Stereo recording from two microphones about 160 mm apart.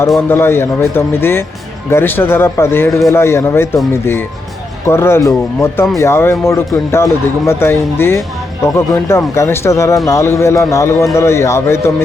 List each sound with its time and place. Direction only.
0.2 s a man's voice: 15° left (ahead or behind)